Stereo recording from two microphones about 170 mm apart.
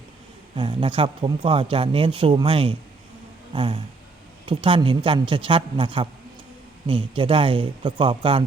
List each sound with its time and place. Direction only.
0.5 s speech: 30° right (ahead or behind)